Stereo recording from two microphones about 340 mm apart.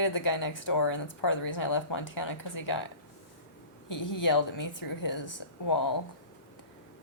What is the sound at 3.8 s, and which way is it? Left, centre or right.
Speech, left.